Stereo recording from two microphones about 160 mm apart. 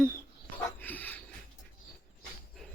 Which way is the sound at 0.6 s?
10° left (ahead or behind).